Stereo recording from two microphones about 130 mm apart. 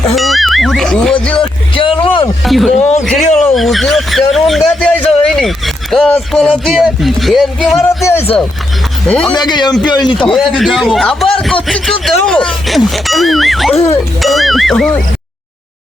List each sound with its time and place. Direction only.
0.2 s music: centre (ahead or behind)
1.4 s a sound: 40° left (ahead or behind)
2.4 s music: centre (ahead or behind)
3.0 s a sound: centre (ahead or behind)
6.7 s speech: centre (ahead or behind)
7.8 s speech: 20° left (ahead or behind)
9.0 s speech: 5° left (ahead or behind)
9.3 s a man's voice: 35° left (ahead or behind)
10.2 s speech: centre (ahead or behind)
13.7 s speech: 50° left (ahead or behind)
14.2 s speech: centre (ahead or behind)